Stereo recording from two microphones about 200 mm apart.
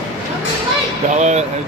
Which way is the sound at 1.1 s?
35° right (ahead or behind).